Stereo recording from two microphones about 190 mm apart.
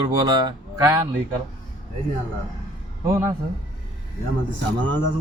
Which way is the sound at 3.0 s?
15° right (ahead or behind).